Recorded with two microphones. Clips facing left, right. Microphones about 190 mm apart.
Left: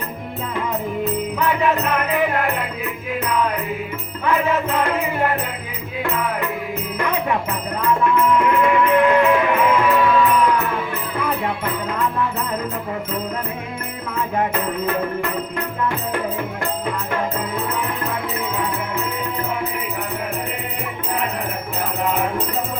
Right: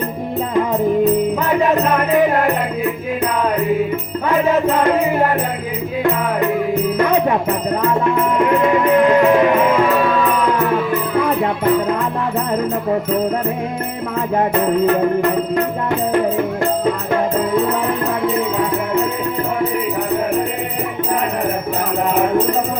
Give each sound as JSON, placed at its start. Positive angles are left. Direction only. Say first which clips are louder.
{"t": 1.4, "sound": "music", "louder": "right 4 dB", "side_deg": -40}
{"t": 4.3, "sound": "music", "louder": "right 4 dB", "side_deg": -35}
{"t": 7.8, "sound": "music", "louder": "left 2 dB", "side_deg": -40}